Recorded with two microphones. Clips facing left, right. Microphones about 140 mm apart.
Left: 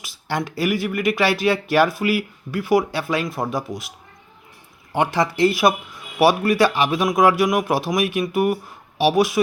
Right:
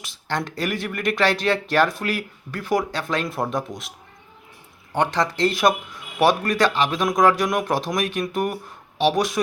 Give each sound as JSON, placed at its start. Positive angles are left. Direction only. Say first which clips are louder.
{"t": 0.0, "sound": "speech", "louder": "left 2 dB", "side_deg": 5}